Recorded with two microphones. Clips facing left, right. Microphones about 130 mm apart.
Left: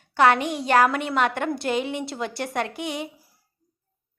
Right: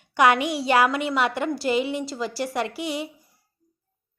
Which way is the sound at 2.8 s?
50° left (ahead or behind).